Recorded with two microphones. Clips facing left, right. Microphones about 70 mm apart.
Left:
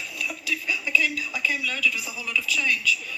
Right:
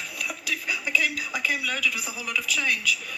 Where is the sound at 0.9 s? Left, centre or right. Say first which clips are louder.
Left 1 dB; right.